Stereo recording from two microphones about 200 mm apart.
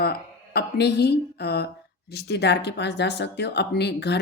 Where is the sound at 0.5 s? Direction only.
55° left (ahead or behind).